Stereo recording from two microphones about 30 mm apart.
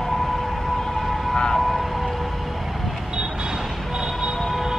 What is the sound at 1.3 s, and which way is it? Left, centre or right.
Vehicle, left.